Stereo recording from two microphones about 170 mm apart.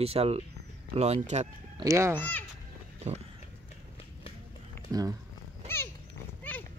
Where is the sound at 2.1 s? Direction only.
10° left (ahead or behind).